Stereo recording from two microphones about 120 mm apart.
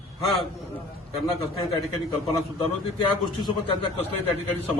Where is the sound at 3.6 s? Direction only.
45° left (ahead or behind).